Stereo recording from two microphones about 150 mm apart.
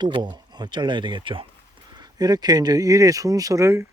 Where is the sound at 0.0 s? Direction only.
30° right (ahead or behind).